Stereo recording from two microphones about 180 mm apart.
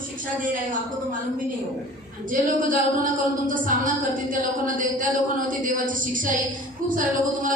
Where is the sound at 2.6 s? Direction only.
50° right (ahead or behind).